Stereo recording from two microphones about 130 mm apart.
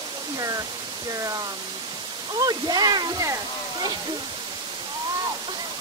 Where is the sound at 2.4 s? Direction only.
30° right (ahead or behind).